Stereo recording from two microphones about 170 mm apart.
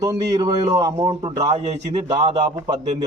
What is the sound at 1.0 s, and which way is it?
Speech, 35° right (ahead or behind).